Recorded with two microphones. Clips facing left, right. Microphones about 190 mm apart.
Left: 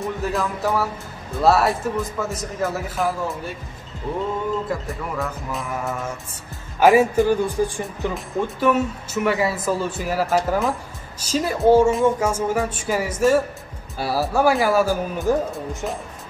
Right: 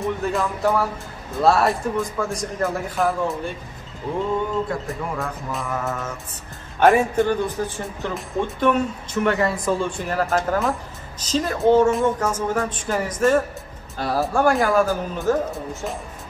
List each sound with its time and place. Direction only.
0.0 s speech: centre (ahead or behind)
5.5 s a woman's voice: centre (ahead or behind)